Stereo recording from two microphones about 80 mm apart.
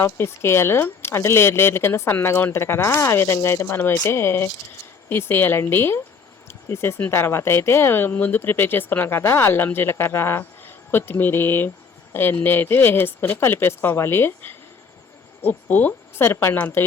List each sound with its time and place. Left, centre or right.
0.0 s a woman's voice: left